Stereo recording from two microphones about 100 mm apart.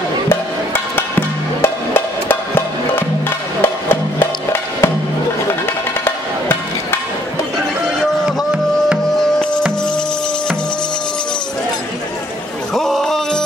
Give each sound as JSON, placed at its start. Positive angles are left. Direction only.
{"t": 0.3, "sound": "music", "side_deg": 20}
{"t": 6.0, "sound": "music", "side_deg": 20}
{"t": 8.0, "sound": "music", "side_deg": -5}
{"t": 12.7, "sound": "music", "side_deg": 5}